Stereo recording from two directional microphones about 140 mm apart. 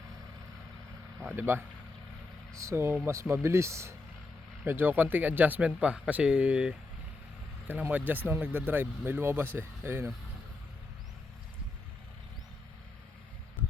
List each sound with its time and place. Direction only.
1.2 s speech: 15° right (ahead or behind)